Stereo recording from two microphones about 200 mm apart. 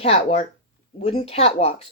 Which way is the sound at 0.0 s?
30° left (ahead or behind).